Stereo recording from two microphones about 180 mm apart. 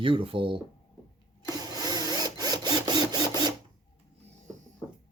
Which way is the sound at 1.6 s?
20° right (ahead or behind).